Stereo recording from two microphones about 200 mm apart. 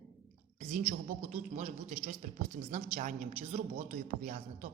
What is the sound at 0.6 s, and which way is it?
A woman's voice, 35° right (ahead or behind).